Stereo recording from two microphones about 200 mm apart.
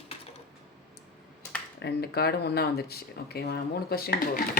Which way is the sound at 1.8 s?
50° left (ahead or behind).